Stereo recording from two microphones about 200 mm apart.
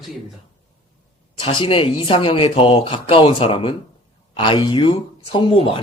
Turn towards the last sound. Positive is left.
turn(degrees=25)  # may be behind; listen again after turning